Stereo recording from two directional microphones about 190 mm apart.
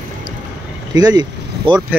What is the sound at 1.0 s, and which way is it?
Speech, 20° right (ahead or behind).